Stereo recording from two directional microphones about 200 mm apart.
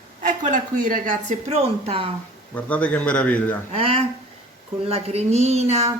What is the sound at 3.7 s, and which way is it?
Speech, 30° right (ahead or behind).